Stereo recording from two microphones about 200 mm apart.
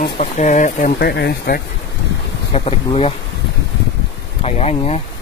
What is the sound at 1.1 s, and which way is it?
Speech, 55° left (ahead or behind).